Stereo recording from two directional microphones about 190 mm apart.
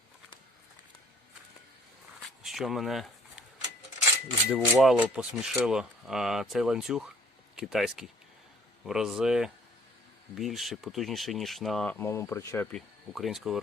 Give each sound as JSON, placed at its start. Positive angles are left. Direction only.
{"t": 2.4, "sound": "a sound", "side_deg": 0}
{"t": 4.5, "sound": "speech", "side_deg": 0}
{"t": 12.7, "sound": "speech", "side_deg": 0}